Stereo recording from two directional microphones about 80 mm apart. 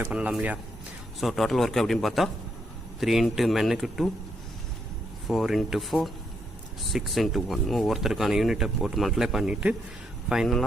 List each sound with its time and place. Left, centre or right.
0.1 s speech: centre
1.2 s speech: centre
5.3 s speech: centre